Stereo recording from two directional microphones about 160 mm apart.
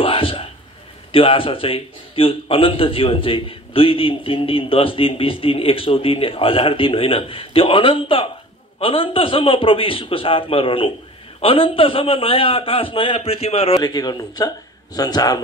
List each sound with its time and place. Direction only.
0.0 s a sound: 35° left (ahead or behind)
1.1 s a man's voice: 35° left (ahead or behind)
13.7 s a man's voice: 25° left (ahead or behind)